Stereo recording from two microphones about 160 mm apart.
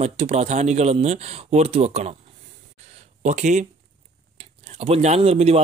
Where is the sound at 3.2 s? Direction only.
45° right (ahead or behind).